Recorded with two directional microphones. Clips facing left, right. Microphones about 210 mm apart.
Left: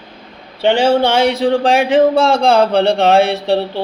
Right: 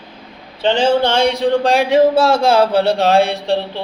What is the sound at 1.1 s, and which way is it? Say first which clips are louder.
Speech: left 1 dB; 5° left (ahead or behind).